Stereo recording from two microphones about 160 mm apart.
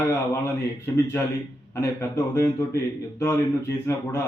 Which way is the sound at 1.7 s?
20° left (ahead or behind).